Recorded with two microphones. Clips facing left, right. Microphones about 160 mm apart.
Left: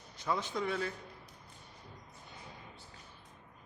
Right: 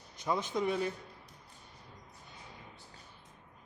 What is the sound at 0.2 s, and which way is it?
Speech, 20° right (ahead or behind).